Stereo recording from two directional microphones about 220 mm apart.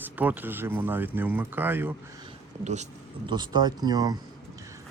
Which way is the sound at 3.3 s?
20° right (ahead or behind).